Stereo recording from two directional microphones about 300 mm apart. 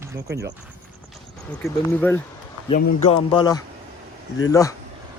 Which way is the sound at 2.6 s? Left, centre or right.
Left.